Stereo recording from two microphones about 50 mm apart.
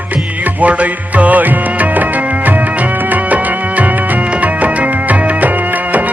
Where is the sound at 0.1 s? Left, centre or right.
Right.